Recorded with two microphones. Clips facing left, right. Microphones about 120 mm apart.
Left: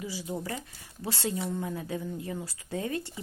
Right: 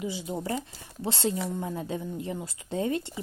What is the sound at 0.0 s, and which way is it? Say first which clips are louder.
Speech: right 3 dB; 25° right (ahead or behind).